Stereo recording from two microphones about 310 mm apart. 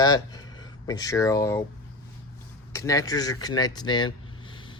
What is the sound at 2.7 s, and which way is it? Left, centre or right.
Speech, centre.